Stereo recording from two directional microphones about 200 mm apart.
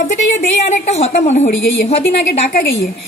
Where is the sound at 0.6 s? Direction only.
35° left (ahead or behind).